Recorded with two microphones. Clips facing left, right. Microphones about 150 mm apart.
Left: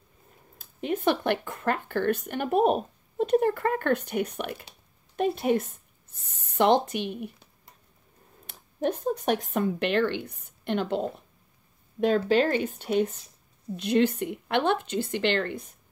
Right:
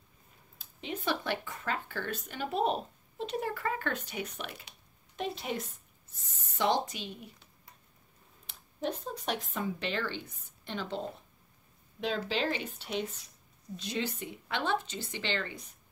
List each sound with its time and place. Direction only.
0.6 s speech: 55° left (ahead or behind)
8.5 s speech: 55° left (ahead or behind)
12.0 s speech: 50° left (ahead or behind)